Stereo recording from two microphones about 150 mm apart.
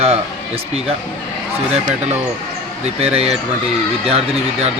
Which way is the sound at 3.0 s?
45° right (ahead or behind).